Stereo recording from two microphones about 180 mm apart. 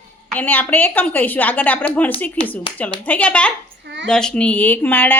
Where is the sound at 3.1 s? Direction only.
10° left (ahead or behind).